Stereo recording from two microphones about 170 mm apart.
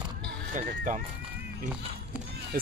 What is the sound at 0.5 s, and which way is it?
Speech, 50° right (ahead or behind).